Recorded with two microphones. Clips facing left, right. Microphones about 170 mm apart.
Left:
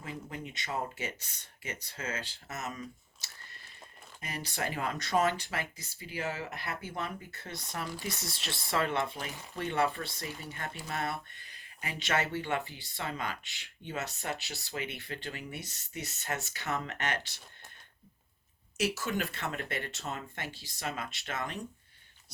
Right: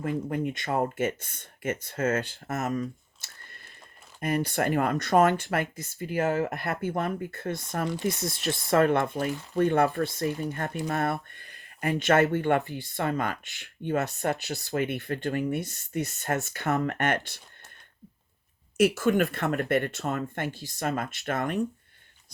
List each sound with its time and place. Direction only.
0.0 s speech: 55° right (ahead or behind)
18.8 s speech: 55° right (ahead or behind)